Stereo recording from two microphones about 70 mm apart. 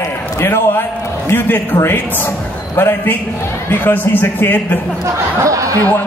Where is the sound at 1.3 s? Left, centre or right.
Left.